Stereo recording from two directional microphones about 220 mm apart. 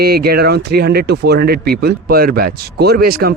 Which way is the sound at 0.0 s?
45° right (ahead or behind).